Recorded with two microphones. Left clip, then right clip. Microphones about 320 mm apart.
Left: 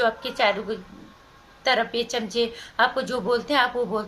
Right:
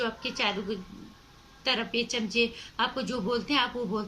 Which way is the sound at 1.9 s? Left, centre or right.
Centre.